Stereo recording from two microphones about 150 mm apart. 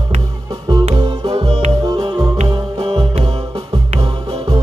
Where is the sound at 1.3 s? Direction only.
45° right (ahead or behind).